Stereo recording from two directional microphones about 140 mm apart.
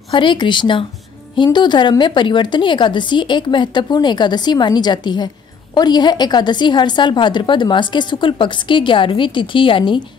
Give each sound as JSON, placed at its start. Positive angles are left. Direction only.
{"t": 0.1, "sound": "a woman's voice", "side_deg": 35}